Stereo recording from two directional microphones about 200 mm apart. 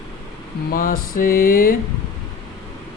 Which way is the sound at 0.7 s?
45° left (ahead or behind).